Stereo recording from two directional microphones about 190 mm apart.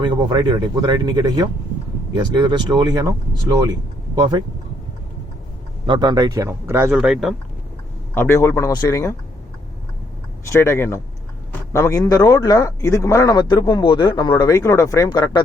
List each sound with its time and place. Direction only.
0.0 s speech: 25° right (ahead or behind)
5.8 s speech: 25° right (ahead or behind); by 7.3 s 5° right (ahead or behind)
8.1 s speech: 15° left (ahead or behind)
10.4 s a man's voice: 15° left (ahead or behind)